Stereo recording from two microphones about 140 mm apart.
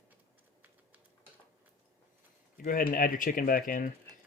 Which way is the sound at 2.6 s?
85° left.